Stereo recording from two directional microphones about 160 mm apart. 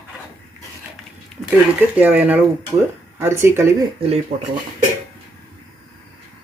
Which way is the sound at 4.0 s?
40° right (ahead or behind).